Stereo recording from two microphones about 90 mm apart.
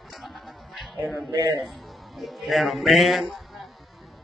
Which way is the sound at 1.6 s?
Centre (ahead or behind).